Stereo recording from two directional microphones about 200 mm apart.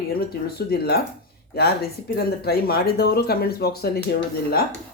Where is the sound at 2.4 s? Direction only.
50° left (ahead or behind).